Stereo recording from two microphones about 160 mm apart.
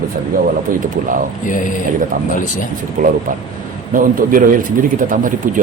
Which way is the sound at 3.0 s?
55° right (ahead or behind).